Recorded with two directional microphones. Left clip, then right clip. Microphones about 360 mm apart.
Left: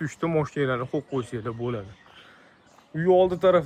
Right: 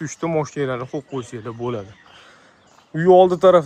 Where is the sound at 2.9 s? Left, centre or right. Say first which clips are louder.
Right 8 dB; centre.